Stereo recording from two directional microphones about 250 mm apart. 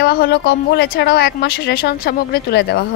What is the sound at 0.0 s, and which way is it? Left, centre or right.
A woman's voice, left.